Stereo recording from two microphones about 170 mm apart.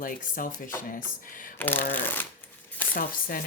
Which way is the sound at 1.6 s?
10° left (ahead or behind).